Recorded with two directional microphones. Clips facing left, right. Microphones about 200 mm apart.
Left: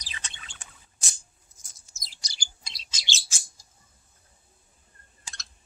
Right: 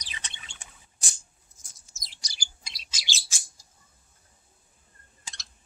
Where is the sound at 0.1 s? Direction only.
15° right (ahead or behind).